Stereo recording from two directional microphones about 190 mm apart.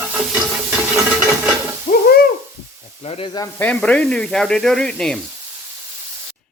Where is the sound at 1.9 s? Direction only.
35° left (ahead or behind).